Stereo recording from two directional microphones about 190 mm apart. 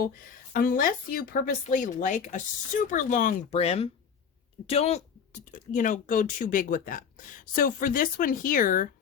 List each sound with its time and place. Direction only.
0.5 s speech: 50° left (ahead or behind)